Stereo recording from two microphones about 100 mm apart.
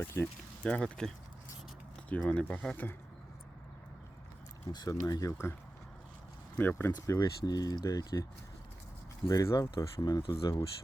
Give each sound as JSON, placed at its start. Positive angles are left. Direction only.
{"t": 0.0, "sound": "speech", "side_deg": 25}
{"t": 0.6, "sound": "speech", "side_deg": 10}
{"t": 4.7, "sound": "speech", "side_deg": 40}
{"t": 6.6, "sound": "speech", "side_deg": 20}
{"t": 7.1, "sound": "speech", "side_deg": 40}
{"t": 9.6, "sound": "speech", "side_deg": 45}